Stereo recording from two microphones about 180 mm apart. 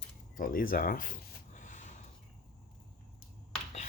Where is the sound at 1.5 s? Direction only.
45° left (ahead or behind).